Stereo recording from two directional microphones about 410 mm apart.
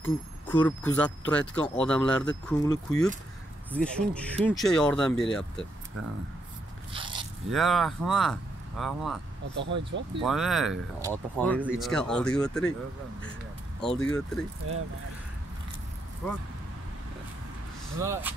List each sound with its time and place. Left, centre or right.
0.0 s speech: centre
6.9 s zipper: centre
7.5 s speech: centre
9.6 s speech: right
10.2 s speech: centre
13.7 s speech: centre
14.6 s speech: right
16.2 s speech: centre
17.9 s speech: centre